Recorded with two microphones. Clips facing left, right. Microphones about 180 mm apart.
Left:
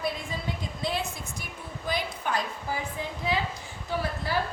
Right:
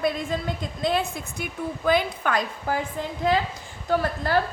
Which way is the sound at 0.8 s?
65° right (ahead or behind).